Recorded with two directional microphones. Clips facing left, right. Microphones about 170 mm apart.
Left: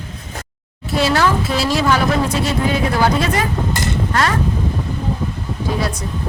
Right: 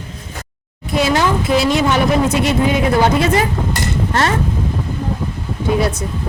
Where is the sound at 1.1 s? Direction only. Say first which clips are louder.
Right 1 dB; 20° right (ahead or behind).